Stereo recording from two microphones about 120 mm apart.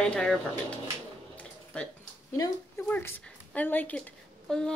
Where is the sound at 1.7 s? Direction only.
10° left (ahead or behind).